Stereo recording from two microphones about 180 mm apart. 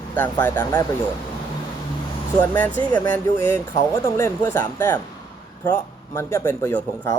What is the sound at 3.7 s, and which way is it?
Speech, 15° left (ahead or behind).